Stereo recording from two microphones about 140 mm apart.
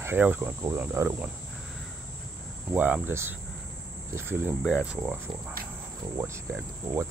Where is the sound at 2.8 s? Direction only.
10° right (ahead or behind).